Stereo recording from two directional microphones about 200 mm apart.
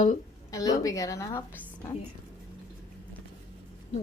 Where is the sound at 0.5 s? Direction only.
15° left (ahead or behind).